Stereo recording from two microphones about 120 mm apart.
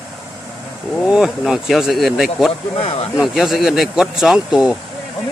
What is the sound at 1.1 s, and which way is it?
Speech, 5° right (ahead or behind).